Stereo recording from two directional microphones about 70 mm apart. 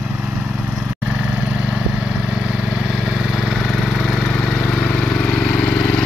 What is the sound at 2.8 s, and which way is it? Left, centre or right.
Lawn mower, centre.